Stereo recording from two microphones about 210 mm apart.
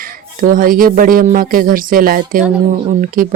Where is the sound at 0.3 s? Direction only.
40° right (ahead or behind).